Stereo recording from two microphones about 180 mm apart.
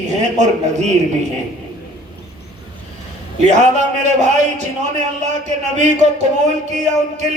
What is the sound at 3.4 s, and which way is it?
A man's voice, 40° right (ahead or behind).